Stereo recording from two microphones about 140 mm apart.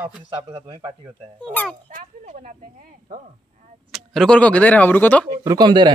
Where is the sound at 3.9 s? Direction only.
Centre (ahead or behind).